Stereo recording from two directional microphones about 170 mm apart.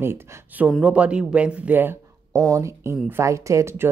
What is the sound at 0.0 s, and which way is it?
Speech, 15° right (ahead or behind).